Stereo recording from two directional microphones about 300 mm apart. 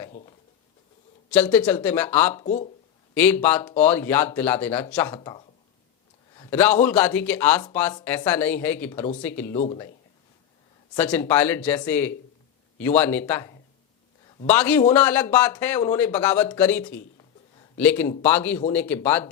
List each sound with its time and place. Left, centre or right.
0.1 s speech: left
1.3 s speech: centre
2.4 s speech: left
3.2 s speech: centre
6.3 s a sound: centre
6.8 s speech: centre
10.9 s speech: centre